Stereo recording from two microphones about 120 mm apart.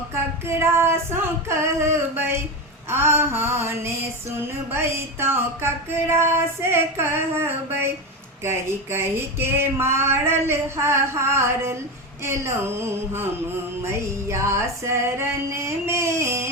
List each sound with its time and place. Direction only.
0.1 s mantra: 20° right (ahead or behind)